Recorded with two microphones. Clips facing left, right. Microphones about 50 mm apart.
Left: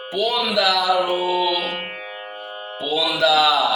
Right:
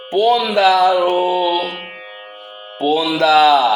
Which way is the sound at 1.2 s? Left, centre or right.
Right.